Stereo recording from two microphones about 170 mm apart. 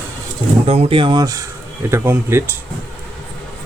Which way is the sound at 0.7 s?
35° right (ahead or behind).